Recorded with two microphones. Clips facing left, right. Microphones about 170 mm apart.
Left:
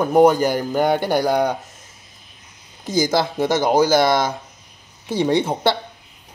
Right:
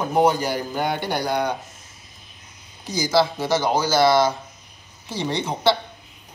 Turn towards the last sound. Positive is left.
turn(degrees=55)  # may be behind; listen again after turning